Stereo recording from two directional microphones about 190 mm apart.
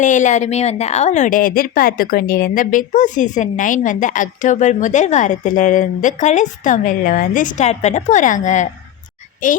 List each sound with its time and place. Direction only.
0.0 s a woman's voice: 40° left (ahead or behind)